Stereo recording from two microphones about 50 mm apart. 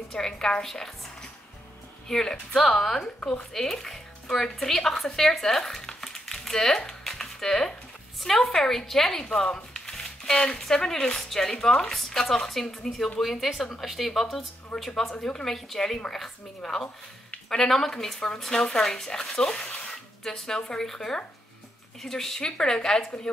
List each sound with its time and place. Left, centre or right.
0.1 s speech: centre
2.0 s speech: centre
3.2 s speech: centre
3.5 s speech: centre
5.9 s crumpling: centre
6.9 s music: centre
8.2 s a woman's voice: centre
15.0 s speech: centre